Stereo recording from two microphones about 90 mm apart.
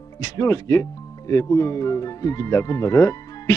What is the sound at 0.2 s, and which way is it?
Speech, 35° left (ahead or behind).